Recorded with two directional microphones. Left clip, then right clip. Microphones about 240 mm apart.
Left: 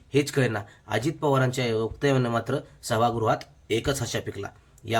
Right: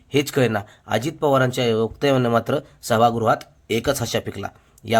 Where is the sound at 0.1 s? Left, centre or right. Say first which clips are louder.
Right 5 dB; right.